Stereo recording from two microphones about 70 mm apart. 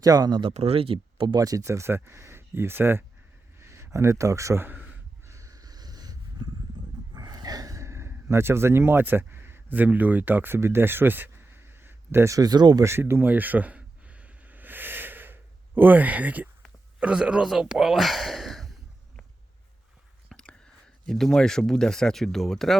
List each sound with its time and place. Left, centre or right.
0.0 s speech: right
1.3 s speech: right
1.6 s speech: right
4.6 s a sound: right
5.2 s a sound: right
7.1 s gasp: right
12.3 s speech: right
12.8 s a sound: right
17.0 s speech: centre
20.3 s whispering: centre
21.1 s speech: centre